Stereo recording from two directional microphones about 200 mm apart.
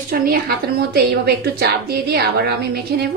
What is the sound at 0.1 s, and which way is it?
A woman's voice, 45° right (ahead or behind).